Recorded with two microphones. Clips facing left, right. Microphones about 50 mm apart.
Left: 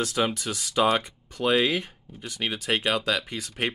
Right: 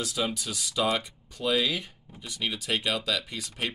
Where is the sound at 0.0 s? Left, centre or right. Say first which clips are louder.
Left 5 dB; left.